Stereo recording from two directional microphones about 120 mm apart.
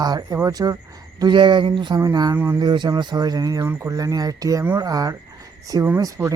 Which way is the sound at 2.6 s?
35° right (ahead or behind).